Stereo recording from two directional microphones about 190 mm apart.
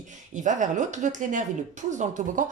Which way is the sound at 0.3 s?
40° right (ahead or behind).